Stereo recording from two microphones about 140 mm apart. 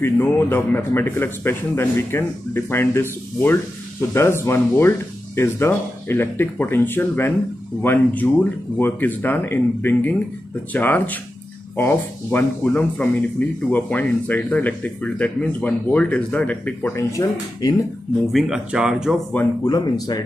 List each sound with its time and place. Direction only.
0.0 s speech: 15° left (ahead or behind)
18.3 s speech: 5° right (ahead or behind)
19.6 s speech: 30° left (ahead or behind)